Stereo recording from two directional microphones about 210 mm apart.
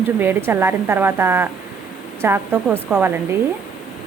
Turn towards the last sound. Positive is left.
turn(degrees=-10)  # may be behind; listen again after turning